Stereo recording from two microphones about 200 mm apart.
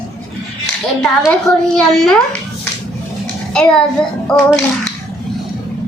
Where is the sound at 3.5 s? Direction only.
5° left (ahead or behind).